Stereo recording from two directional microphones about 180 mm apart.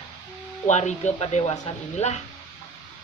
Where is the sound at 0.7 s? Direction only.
40° left (ahead or behind).